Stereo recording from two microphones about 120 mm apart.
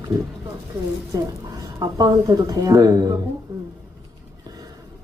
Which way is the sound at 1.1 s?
30° right (ahead or behind).